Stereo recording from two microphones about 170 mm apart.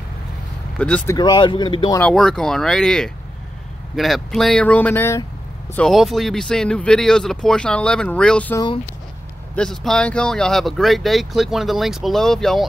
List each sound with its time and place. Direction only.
0.7 s speech: 5° left (ahead or behind)
1.1 s speech: 25° left (ahead or behind)
2.0 s speech: 5° left (ahead or behind)
5.8 s speech: centre (ahead or behind)
9.6 s speech: 5° left (ahead or behind)